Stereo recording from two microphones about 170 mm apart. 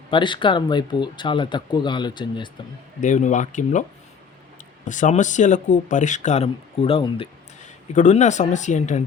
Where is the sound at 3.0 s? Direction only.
45° left (ahead or behind).